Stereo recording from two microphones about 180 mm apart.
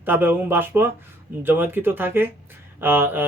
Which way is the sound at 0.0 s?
10° right (ahead or behind).